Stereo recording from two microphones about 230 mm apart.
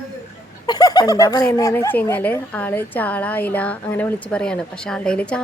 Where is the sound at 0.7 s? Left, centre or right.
Centre.